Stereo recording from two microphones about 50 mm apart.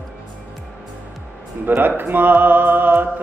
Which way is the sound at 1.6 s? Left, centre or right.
Right.